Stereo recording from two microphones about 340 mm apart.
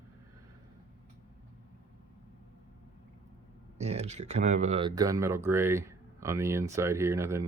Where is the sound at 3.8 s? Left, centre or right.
Centre.